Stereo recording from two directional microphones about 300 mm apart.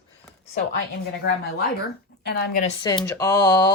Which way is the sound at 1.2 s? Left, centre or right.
Right.